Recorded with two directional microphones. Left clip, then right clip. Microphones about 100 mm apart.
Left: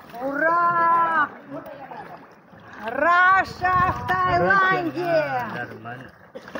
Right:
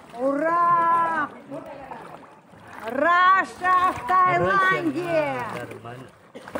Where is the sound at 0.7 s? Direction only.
10° left (ahead or behind).